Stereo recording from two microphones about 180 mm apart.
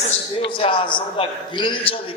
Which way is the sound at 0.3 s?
30° left (ahead or behind).